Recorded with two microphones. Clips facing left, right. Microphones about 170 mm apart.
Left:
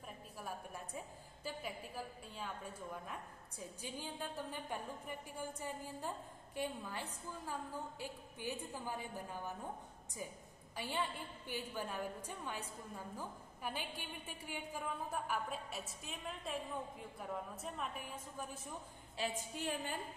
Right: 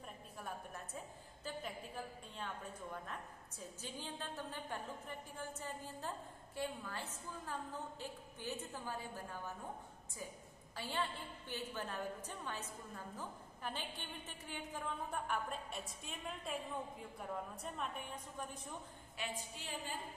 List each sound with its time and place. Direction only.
0.4 s a woman's voice: 10° left (ahead or behind)
10.8 s a woman's voice: 15° left (ahead or behind)
19.1 s a woman's voice: 35° left (ahead or behind)